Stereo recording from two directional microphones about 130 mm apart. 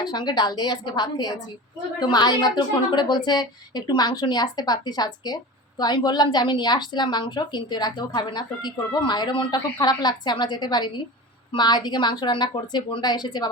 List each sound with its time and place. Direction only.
0.0 s a woman's voice: 35° left (ahead or behind)